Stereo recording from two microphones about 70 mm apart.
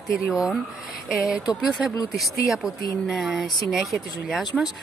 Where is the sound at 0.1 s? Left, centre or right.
Centre.